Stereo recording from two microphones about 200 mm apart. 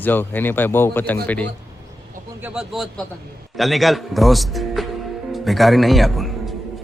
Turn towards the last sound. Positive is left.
turn(degrees=0)  # may be behind; listen again after turning